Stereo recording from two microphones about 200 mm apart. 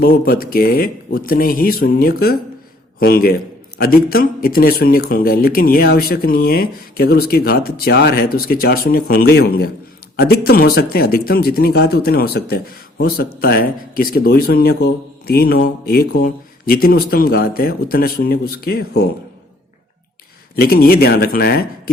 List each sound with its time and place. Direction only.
0.0 s speech: 50° left (ahead or behind)
20.6 s speech: 50° left (ahead or behind)